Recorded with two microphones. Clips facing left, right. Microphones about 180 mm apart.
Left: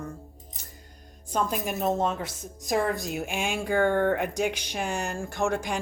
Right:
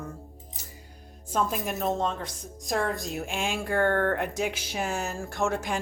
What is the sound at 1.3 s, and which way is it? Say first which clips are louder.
A woman's voice: even; centre (ahead or behind).